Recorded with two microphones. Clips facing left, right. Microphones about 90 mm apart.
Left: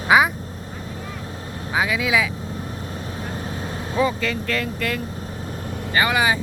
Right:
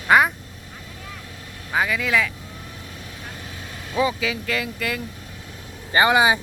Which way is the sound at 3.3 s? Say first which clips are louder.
Left 8 dB; 35° left (ahead or behind).